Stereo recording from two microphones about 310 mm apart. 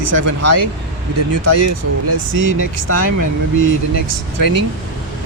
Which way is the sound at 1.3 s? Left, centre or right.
Left.